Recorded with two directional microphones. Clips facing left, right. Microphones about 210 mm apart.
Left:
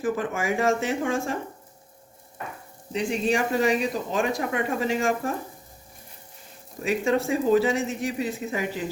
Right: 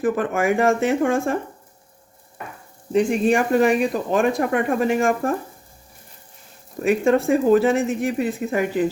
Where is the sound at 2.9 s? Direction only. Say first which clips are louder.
Right 7 dB; 50° right (ahead or behind).